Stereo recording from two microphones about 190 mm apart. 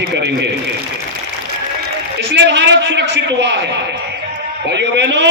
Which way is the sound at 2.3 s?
65° right (ahead or behind).